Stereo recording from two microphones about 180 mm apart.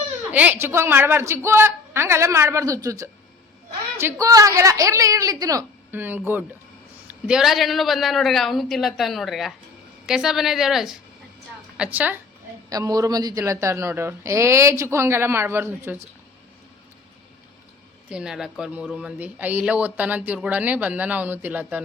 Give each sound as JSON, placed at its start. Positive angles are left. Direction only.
{"t": 0.3, "sound": "a man's voice", "side_deg": -10}
{"t": 12.7, "sound": "speech", "side_deg": -20}
{"t": 18.1, "sound": "speech", "side_deg": -5}